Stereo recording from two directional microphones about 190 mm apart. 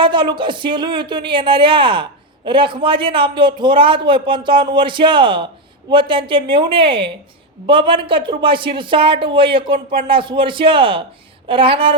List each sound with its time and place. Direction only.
0.0 s speech: 25° right (ahead or behind)